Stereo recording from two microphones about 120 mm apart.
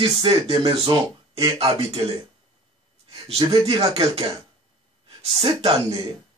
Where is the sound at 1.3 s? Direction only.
55° right (ahead or behind).